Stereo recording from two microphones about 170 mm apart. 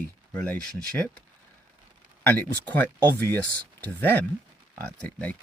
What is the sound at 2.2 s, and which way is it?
Speech, 10° left (ahead or behind).